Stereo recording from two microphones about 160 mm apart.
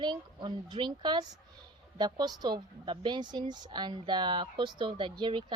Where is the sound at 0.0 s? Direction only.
30° right (ahead or behind).